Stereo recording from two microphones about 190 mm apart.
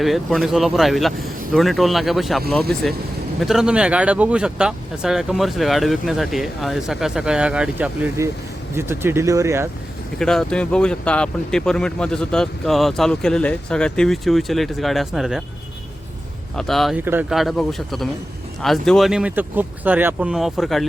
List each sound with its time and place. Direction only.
0.0 s speech: centre (ahead or behind); by 9.6 s 15° right (ahead or behind)
10.2 s speech: centre (ahead or behind)
16.6 s speech: centre (ahead or behind)